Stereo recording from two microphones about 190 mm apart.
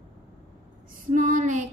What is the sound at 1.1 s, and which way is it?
Speech, 45° right (ahead or behind).